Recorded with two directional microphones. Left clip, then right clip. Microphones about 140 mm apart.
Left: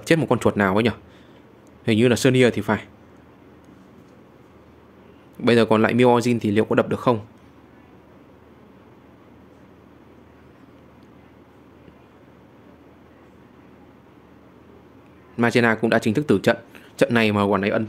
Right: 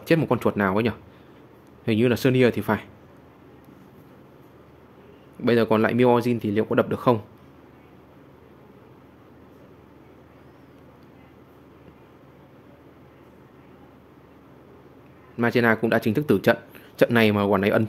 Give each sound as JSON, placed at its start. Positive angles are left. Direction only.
{"t": 0.0, "sound": "speech", "side_deg": 10}
{"t": 5.4, "sound": "speech", "side_deg": 10}
{"t": 15.3, "sound": "speech", "side_deg": 10}
{"t": 17.6, "sound": "speech", "side_deg": -15}